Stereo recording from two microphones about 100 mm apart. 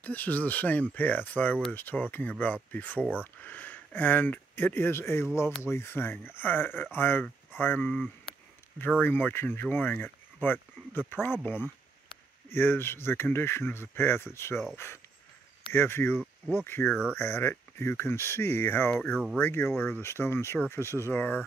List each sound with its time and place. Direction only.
0.0 s speech: 15° left (ahead or behind)
9.0 s speech: 20° left (ahead or behind)